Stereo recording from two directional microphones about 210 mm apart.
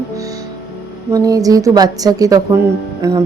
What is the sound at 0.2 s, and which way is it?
Music, 15° right (ahead or behind).